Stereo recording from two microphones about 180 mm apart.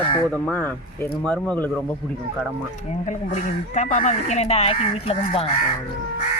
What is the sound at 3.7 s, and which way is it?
Speech, 40° left (ahead or behind).